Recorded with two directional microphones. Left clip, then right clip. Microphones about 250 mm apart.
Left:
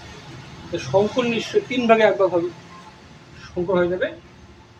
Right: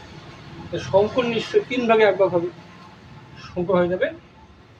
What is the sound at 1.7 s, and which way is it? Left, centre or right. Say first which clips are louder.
Speech: left 2 dB; left.